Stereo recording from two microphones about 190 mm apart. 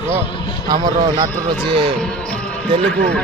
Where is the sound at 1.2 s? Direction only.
25° right (ahead or behind).